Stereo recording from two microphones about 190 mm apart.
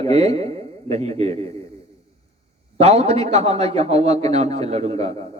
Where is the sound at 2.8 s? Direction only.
35° right (ahead or behind).